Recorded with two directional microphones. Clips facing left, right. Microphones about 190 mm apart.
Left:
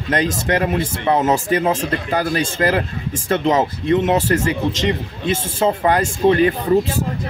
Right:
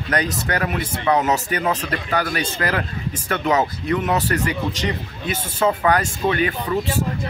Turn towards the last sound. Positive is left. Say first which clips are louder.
# left 7 dB
turn(degrees=35)  # may be behind; listen again after turning